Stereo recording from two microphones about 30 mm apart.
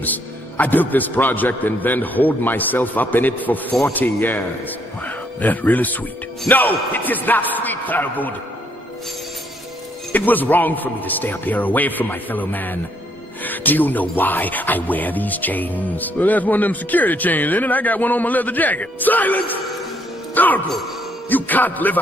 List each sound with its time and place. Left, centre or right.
0.0 s a man's voice: left
3.8 s speech: left
5.0 s music: left
6.5 s speech: left
10.1 s a man's voice: left